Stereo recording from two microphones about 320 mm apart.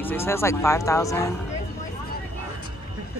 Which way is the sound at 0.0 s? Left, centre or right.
Centre.